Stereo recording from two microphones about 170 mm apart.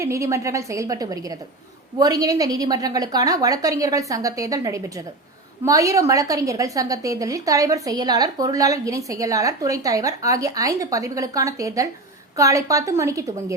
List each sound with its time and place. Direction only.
0.0 s a woman's voice: 15° right (ahead or behind)